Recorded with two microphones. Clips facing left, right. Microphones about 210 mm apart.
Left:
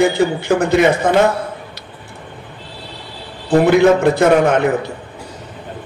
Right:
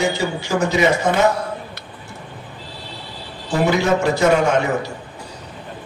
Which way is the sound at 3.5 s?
55° left (ahead or behind).